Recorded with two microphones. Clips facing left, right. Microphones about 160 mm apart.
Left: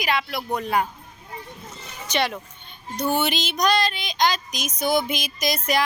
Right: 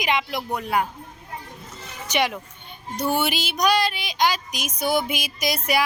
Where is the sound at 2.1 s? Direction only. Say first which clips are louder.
Right 1 dB; 10° right (ahead or behind).